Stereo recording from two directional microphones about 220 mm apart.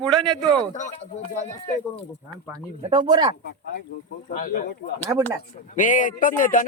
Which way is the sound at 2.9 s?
20° right (ahead or behind).